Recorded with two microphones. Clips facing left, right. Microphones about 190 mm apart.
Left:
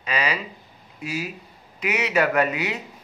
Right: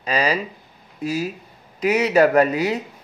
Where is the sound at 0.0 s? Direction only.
35° right (ahead or behind).